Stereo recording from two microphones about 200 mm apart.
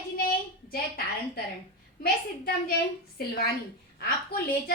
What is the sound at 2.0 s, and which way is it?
Speech, 50° left (ahead or behind).